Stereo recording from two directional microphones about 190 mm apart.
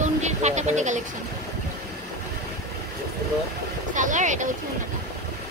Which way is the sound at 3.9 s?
40° right (ahead or behind).